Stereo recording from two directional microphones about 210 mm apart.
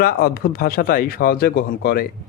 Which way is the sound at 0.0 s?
45° left (ahead or behind).